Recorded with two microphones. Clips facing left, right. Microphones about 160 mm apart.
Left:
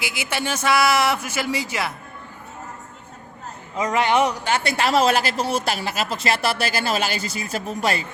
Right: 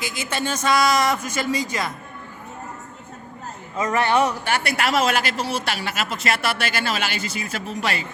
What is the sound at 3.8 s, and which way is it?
A man's voice, 15° left (ahead or behind).